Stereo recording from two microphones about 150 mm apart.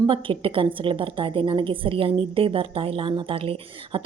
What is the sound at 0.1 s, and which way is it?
A woman's voice, 35° right (ahead or behind).